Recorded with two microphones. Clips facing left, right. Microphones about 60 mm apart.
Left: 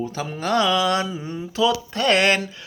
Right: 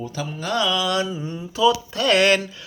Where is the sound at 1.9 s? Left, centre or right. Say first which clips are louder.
Right 1 dB; left.